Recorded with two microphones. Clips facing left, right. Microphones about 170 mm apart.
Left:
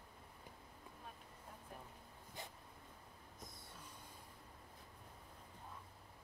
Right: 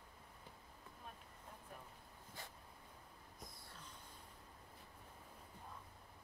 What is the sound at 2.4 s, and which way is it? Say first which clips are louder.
Dog: left 3 dB; 20° left (ahead or behind).